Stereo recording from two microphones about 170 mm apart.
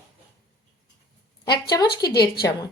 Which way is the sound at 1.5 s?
25° left (ahead or behind).